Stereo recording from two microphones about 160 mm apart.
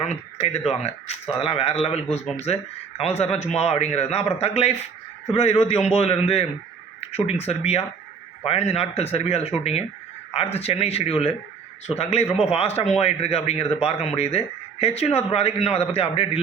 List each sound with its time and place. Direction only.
0.0 s speech: 45° left (ahead or behind)